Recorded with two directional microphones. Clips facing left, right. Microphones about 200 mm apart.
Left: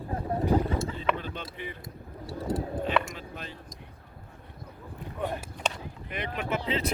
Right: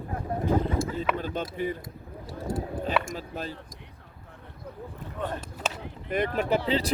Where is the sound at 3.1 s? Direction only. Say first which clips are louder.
Right 6 dB; 40° right (ahead or behind).